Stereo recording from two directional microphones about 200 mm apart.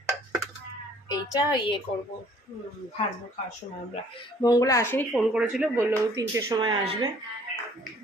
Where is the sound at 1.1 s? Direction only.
20° left (ahead or behind).